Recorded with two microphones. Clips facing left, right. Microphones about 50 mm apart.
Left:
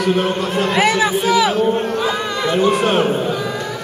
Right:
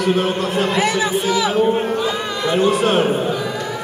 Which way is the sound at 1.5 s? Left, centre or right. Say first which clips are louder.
Even; centre.